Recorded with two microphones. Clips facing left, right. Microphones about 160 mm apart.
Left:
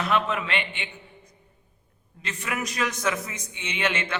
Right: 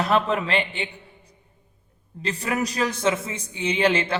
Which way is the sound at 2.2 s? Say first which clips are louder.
Right 6 dB; 35° right (ahead or behind).